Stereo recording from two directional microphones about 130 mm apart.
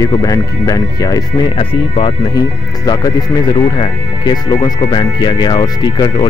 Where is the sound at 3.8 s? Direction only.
30° left (ahead or behind).